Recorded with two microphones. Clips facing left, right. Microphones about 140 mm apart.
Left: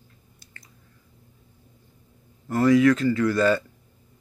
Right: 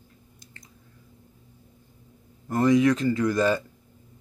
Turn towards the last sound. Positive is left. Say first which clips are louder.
# left 2 dB
turn(degrees=-15)  # may be behind; listen again after turning